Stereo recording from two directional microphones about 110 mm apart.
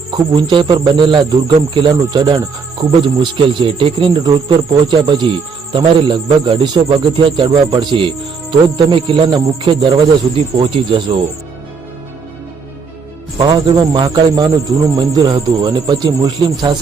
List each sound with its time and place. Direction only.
0.1 s a man's voice: 45° right (ahead or behind)
13.4 s speech: 40° right (ahead or behind)